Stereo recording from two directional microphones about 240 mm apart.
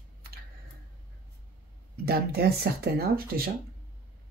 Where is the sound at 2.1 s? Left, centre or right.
Right.